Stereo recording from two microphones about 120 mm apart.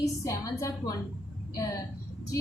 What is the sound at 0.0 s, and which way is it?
Speech, 25° left (ahead or behind).